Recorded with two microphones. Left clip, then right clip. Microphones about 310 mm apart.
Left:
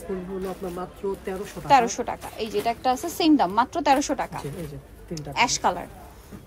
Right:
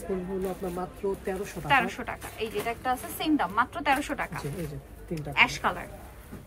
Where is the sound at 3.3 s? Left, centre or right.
Centre.